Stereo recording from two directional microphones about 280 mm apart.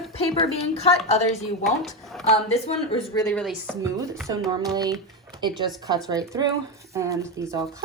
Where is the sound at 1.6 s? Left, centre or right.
Centre.